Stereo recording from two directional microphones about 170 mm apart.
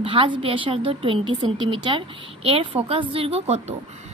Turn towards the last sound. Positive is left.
turn(degrees=-35)  # may be behind; listen again after turning